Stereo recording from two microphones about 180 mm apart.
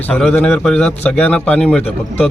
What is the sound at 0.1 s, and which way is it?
Speech, 5° left (ahead or behind).